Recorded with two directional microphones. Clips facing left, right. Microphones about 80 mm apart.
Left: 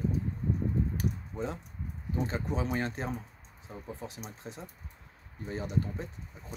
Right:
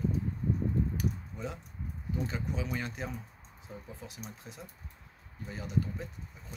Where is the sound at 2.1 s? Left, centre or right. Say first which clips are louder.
Left 4 dB; left.